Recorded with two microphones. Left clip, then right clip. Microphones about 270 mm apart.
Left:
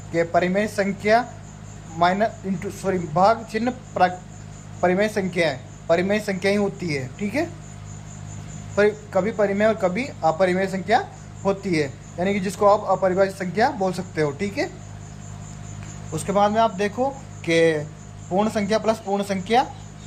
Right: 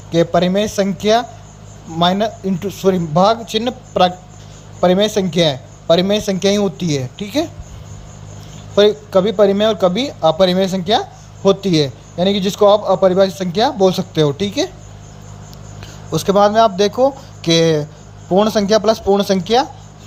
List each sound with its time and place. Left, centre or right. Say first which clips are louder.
0.1 s speech: right 6 dB; right
8.7 s speech: right 8 dB; right
16.1 s speech: right 8 dB; right